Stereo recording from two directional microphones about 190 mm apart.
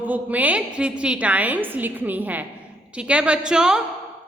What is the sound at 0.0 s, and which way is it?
A woman's voice, 10° right (ahead or behind).